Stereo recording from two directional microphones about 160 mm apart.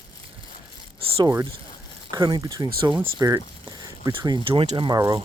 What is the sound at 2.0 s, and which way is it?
Speech, 25° right (ahead or behind).